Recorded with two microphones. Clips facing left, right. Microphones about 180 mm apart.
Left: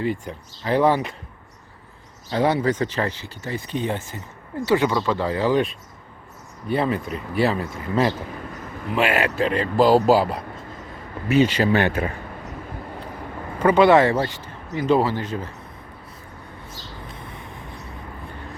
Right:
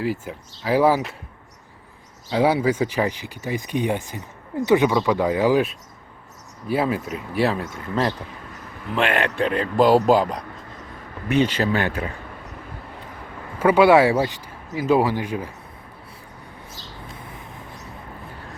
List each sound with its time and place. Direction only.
0.0 s a man's voice: 5° right (ahead or behind)
2.3 s a man's voice: 10° right (ahead or behind); by 11.7 s 10° left (ahead or behind)
13.6 s speech: 10° right (ahead or behind)